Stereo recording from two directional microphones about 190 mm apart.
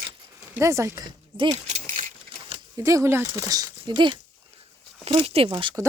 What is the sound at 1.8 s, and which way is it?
Keys jangling, 45° right (ahead or behind).